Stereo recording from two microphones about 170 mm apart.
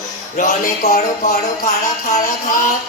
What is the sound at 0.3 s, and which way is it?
Music, 50° left (ahead or behind).